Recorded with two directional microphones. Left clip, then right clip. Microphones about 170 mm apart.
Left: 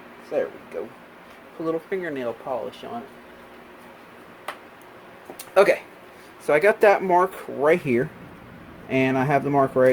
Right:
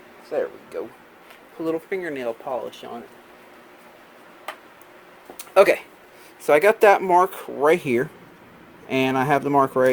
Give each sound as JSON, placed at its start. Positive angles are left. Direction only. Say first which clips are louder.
{"t": 1.6, "sound": "speech", "louder": "right 1 dB", "side_deg": -45}
{"t": 5.4, "sound": "a sound", "louder": "right 2 dB", "side_deg": -45}
{"t": 6.4, "sound": "speech", "louder": "right 2 dB", "side_deg": -40}